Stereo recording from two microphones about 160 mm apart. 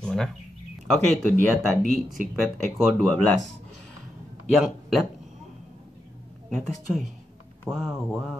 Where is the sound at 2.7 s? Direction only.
5° left (ahead or behind).